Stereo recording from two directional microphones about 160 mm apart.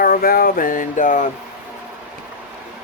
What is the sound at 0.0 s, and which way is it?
Speech, 65° left (ahead or behind).